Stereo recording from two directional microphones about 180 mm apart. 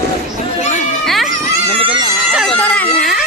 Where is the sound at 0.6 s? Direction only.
40° left (ahead or behind).